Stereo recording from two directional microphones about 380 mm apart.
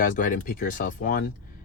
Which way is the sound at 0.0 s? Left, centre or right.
Left.